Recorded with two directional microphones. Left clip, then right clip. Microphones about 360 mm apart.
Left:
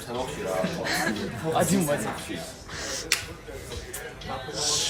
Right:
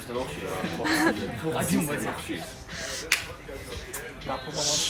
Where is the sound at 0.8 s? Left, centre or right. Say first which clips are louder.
Right 6 dB; centre.